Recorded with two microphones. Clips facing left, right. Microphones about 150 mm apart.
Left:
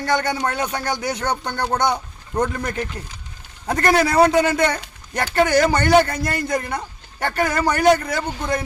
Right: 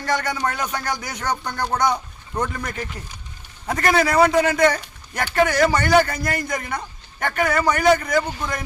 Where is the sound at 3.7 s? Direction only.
25° left (ahead or behind).